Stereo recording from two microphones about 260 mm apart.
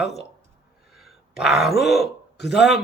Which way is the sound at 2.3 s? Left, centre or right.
Left.